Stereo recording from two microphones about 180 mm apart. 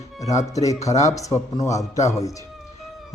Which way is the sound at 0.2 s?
20° left (ahead or behind).